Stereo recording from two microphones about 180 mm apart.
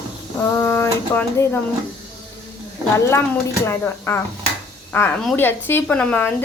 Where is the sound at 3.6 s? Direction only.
15° left (ahead or behind).